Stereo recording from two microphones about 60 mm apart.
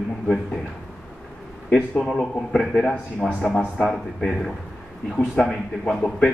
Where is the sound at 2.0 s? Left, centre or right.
Centre.